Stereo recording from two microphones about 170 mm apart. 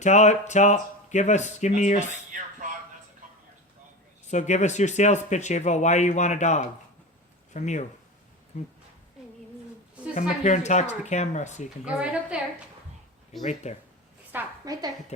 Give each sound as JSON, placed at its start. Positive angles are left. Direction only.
{"t": 0.0, "sound": "speech", "side_deg": 45}
{"t": 4.3, "sound": "speech", "side_deg": 45}
{"t": 10.2, "sound": "speech", "side_deg": 45}
{"t": 11.9, "sound": "a woman's voice", "side_deg": -5}
{"t": 13.4, "sound": "speech", "side_deg": 40}
{"t": 14.3, "sound": "a woman's voice", "side_deg": -20}